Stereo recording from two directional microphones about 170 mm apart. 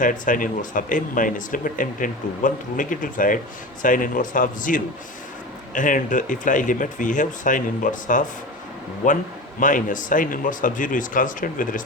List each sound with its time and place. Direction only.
0.0 s speech: 50° left (ahead or behind)